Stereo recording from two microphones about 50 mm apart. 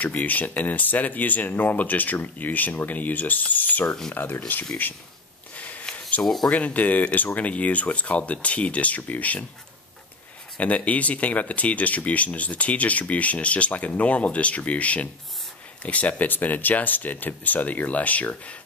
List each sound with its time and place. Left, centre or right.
0.0 s speech: left
5.6 s a sound: left
6.5 s speech: left
10.6 s speech: left